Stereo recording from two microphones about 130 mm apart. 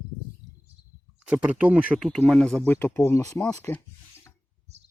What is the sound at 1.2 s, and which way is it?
Speech, 10° right (ahead or behind).